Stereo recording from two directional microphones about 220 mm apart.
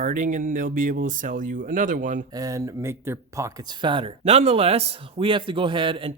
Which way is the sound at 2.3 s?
15° right (ahead or behind).